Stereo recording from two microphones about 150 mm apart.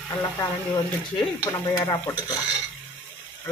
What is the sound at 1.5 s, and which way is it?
Speech, 20° left (ahead or behind).